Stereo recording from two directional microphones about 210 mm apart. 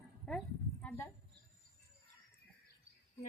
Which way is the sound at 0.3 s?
5° left (ahead or behind).